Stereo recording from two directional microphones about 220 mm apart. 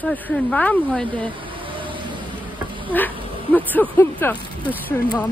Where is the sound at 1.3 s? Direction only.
25° right (ahead or behind).